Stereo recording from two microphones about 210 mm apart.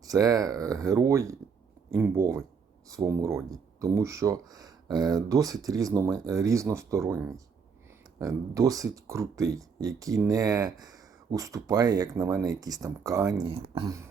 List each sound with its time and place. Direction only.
0.0 s speech: 15° right (ahead or behind)